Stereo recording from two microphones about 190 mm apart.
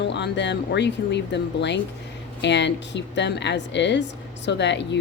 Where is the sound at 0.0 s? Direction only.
65° left (ahead or behind).